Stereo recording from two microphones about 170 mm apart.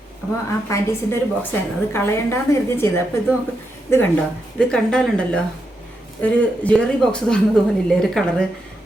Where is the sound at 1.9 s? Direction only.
15° left (ahead or behind).